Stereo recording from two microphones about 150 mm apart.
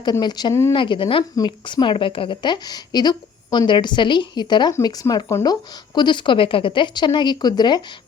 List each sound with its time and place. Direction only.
0.0 s speech: 30° left (ahead or behind)
0.7 s a woman's voice: 35° left (ahead or behind)